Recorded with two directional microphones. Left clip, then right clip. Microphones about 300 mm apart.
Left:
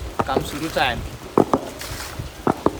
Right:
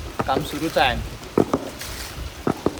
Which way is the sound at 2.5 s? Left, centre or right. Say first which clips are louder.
Left 4 dB; centre.